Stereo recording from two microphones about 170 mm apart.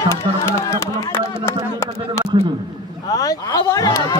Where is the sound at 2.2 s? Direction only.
15° left (ahead or behind).